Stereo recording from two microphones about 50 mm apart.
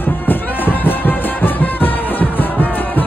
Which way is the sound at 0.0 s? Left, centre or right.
Left.